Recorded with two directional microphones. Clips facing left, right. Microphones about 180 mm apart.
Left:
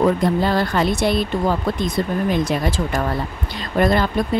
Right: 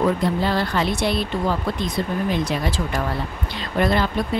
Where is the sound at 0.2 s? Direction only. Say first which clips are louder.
Left 3 dB; 45° left (ahead or behind).